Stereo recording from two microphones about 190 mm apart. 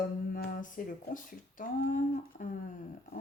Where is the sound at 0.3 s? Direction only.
50° left (ahead or behind).